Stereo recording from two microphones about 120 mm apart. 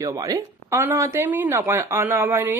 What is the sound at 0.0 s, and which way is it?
Speech, 30° right (ahead or behind).